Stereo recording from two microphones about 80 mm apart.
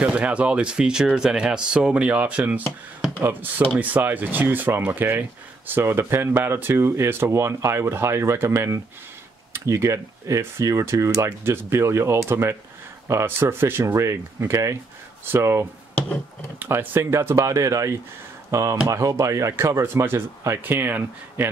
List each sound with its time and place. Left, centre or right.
0.0 s speech: centre